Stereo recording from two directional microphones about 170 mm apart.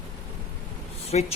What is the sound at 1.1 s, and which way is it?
Speech, 40° left (ahead or behind).